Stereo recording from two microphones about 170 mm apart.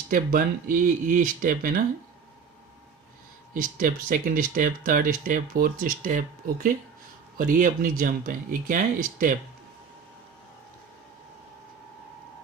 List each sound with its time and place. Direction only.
0.1 s speech: 55° right (ahead or behind)
3.5 s speech: 55° right (ahead or behind)